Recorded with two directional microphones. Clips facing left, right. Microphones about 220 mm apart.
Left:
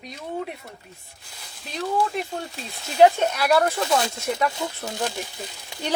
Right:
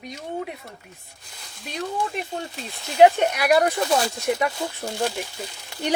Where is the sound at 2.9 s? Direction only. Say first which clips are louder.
Right 1 dB; 15° right (ahead or behind).